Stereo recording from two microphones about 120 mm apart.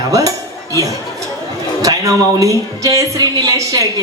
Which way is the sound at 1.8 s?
30° right (ahead or behind).